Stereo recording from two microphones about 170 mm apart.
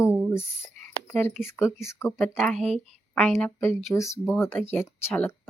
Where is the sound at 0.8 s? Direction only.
10° left (ahead or behind).